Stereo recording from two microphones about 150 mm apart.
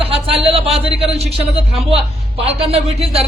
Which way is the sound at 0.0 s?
40° right (ahead or behind).